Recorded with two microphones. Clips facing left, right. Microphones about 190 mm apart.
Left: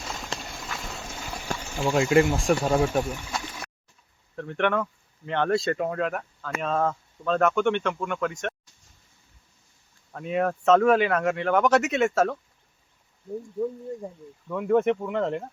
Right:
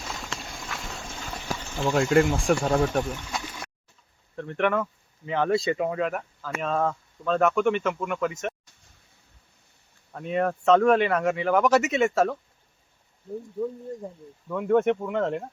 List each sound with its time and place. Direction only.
0.3 s clip-clop: centre (ahead or behind)
1.5 s speech: 10° left (ahead or behind)
10.1 s speech: centre (ahead or behind)
14.5 s speech: centre (ahead or behind)